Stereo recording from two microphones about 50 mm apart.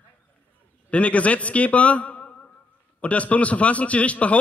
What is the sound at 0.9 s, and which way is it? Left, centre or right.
A man's voice, left.